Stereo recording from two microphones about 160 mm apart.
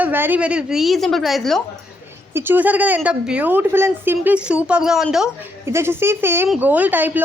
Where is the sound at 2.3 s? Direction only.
15° right (ahead or behind).